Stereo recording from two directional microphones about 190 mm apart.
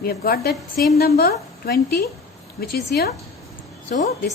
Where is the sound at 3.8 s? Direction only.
40° left (ahead or behind).